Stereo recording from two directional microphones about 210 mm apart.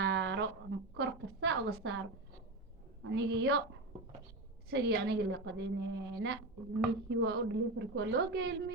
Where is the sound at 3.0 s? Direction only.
60° right (ahead or behind).